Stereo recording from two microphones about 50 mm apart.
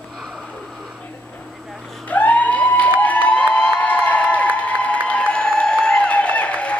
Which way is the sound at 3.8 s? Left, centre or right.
Left.